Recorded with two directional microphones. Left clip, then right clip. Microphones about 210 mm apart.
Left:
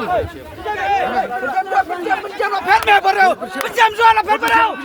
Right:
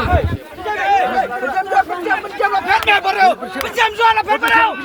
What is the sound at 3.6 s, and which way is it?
Speech, 50° left (ahead or behind).